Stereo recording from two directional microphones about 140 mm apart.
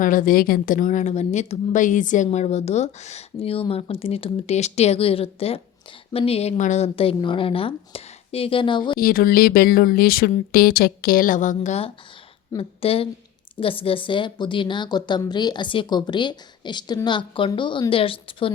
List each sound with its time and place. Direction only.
0.0 s a woman's voice: 70° left (ahead or behind); by 9.0 s 35° left (ahead or behind)
9.0 s speech: 90° left; by 11.9 s 55° left (ahead or behind)
12.5 s a woman's voice: 40° left (ahead or behind)